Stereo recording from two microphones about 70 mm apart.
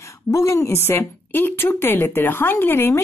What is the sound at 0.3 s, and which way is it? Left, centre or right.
Speech, left.